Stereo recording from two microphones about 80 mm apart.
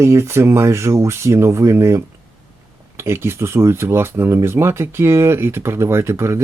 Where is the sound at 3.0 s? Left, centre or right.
Right.